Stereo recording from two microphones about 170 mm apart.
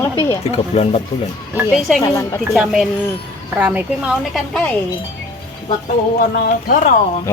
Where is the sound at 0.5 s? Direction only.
40° left (ahead or behind).